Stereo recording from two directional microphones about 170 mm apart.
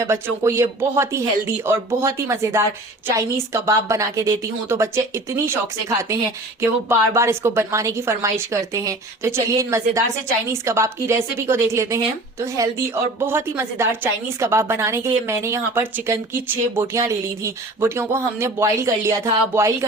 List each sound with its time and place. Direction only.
0.1 s a woman's voice: 15° right (ahead or behind)
6.6 s a woman's voice: 15° right (ahead or behind)